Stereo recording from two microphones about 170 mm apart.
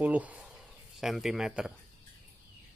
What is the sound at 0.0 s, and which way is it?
Speech, 10° right (ahead or behind).